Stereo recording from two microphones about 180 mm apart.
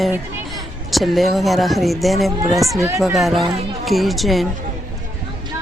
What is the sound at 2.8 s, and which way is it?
Speech, 15° right (ahead or behind).